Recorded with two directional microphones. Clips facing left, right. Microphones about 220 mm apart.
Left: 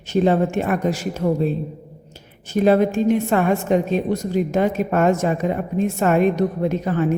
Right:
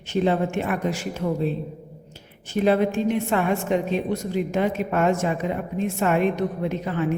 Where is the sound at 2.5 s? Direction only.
45° left (ahead or behind).